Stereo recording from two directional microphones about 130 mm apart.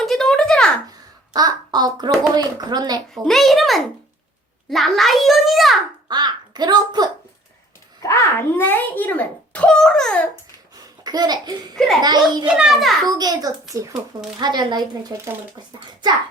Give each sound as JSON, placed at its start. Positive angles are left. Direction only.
{"t": 0.0, "sound": "a sound", "side_deg": 0}
{"t": 0.9, "sound": "a sound", "side_deg": -30}
{"t": 2.3, "sound": "a child's voice", "side_deg": -30}
{"t": 3.2, "sound": "a child's voice", "side_deg": 0}
{"t": 6.1, "sound": "a child's voice", "side_deg": -35}
{"t": 8.0, "sound": "a child's voice", "side_deg": 20}
{"t": 11.0, "sound": "a child's voice", "side_deg": -30}
{"t": 12.5, "sound": "a child's voice", "side_deg": -5}
{"t": 13.1, "sound": "a child's voice", "side_deg": -30}